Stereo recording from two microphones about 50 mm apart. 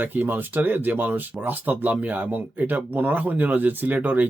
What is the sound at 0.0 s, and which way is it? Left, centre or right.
Speech, right.